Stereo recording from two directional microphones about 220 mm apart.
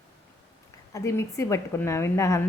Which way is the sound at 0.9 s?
15° left (ahead or behind).